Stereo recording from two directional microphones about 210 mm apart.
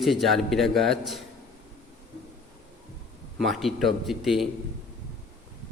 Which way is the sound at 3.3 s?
Centre (ahead or behind).